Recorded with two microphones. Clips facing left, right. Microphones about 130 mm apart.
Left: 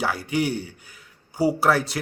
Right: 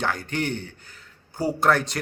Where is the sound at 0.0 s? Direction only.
10° left (ahead or behind).